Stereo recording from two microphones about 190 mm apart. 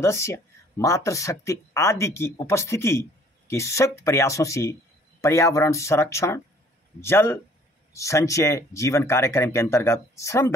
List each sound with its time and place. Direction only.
0.0 s speech: 15° left (ahead or behind)